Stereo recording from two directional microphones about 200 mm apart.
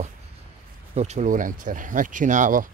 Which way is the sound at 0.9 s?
35° right (ahead or behind).